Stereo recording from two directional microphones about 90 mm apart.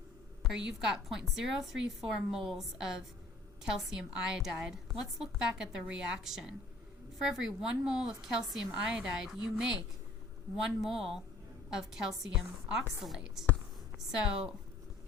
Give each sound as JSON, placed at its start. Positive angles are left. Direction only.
{"t": 0.5, "sound": "a woman's voice", "side_deg": -5}
{"t": 10.8, "sound": "a woman's voice", "side_deg": -5}